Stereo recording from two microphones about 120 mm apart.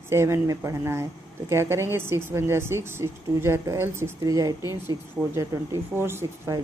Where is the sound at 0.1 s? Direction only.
25° right (ahead or behind).